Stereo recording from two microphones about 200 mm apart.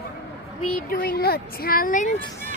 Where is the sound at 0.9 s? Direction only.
45° left (ahead or behind).